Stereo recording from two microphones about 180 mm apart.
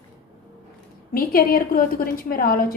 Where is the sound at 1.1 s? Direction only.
55° left (ahead or behind).